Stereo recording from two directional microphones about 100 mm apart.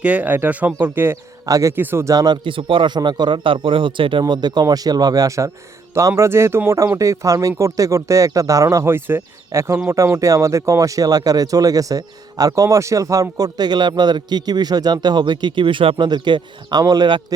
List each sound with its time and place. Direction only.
0.0 s speech: 15° right (ahead or behind)
1.5 s speech: 35° right (ahead or behind)
1.7 s speech: 20° right (ahead or behind)
2.1 s a man's voice: 45° right (ahead or behind)
4.2 s speech: 45° right (ahead or behind); by 16.0 s 60° right (ahead or behind)
16.0 s speech: 45° right (ahead or behind)